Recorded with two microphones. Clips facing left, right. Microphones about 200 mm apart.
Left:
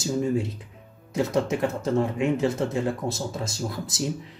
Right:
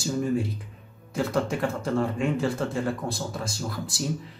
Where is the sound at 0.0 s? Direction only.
20° left (ahead or behind).